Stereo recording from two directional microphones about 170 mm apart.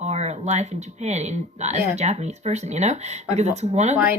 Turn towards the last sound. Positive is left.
turn(degrees=-40)  # may be behind; listen again after turning